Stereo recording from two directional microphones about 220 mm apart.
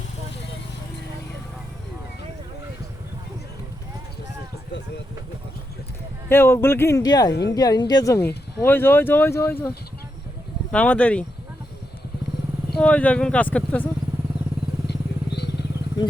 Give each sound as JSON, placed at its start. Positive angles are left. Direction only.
{"t": 6.2, "sound": "speech", "side_deg": 10}
{"t": 12.8, "sound": "speech", "side_deg": 5}
{"t": 14.8, "sound": "vehicle", "side_deg": 50}